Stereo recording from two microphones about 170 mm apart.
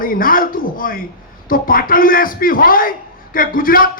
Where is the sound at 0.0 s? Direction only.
55° left (ahead or behind).